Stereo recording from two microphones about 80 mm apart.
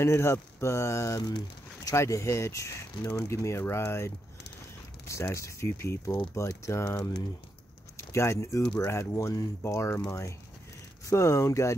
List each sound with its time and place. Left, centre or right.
0.0 s speech: left
3.0 s speech: left
3.3 s speech: left
8.0 s speech: left
11.1 s speech: left